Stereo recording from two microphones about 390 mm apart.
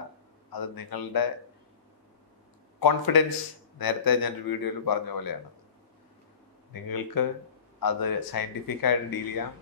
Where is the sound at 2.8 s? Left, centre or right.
Left.